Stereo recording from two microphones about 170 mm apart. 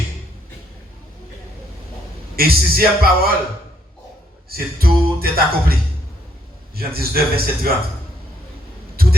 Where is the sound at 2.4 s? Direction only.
60° right (ahead or behind).